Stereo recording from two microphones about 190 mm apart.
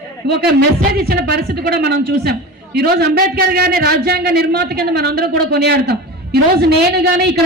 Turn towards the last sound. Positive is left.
turn(degrees=-60)  # may be behind; listen again after turning